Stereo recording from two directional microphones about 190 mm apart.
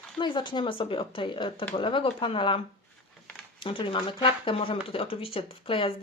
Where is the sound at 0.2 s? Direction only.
25° left (ahead or behind).